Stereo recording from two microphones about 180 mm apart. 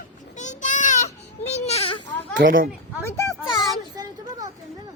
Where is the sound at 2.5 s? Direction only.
50° right (ahead or behind).